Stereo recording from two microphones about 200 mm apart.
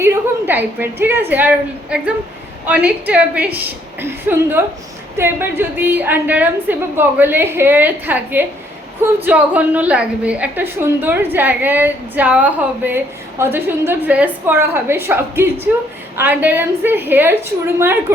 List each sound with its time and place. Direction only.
0.0 s a woman's voice: 10° right (ahead or behind)